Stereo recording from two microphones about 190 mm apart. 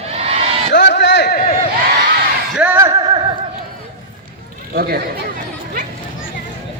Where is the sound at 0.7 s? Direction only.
65° left (ahead or behind).